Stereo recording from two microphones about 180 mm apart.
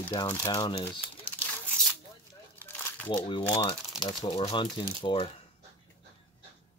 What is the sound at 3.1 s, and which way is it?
Speech, 25° left (ahead or behind).